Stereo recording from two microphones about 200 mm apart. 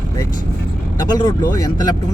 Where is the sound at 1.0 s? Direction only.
20° left (ahead or behind).